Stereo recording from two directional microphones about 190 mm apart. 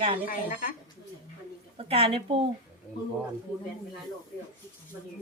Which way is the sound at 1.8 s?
30° right (ahead or behind).